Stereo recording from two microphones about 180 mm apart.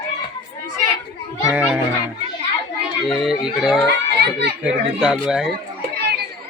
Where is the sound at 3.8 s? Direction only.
65° right (ahead or behind).